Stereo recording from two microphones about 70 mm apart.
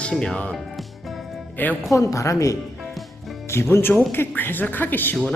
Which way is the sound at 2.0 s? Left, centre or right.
Left.